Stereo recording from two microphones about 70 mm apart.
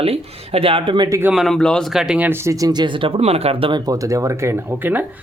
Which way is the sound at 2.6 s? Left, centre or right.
Right.